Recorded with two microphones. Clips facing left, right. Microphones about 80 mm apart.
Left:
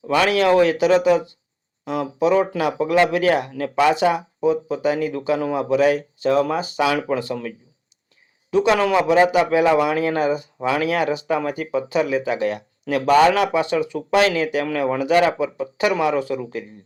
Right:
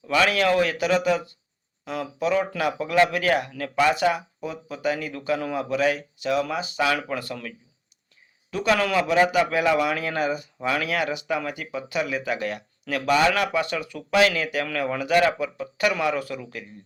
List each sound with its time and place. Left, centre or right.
0.1 s a man's voice: left
13.3 s a man's voice: left